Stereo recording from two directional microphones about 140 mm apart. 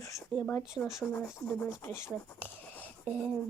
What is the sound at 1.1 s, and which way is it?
Speech, 20° left (ahead or behind).